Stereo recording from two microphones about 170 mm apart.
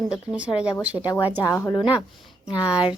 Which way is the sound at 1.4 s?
15° left (ahead or behind).